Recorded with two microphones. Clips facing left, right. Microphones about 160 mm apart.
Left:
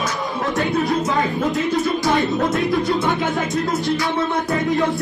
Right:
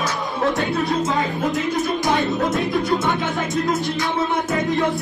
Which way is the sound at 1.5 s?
20° right (ahead or behind).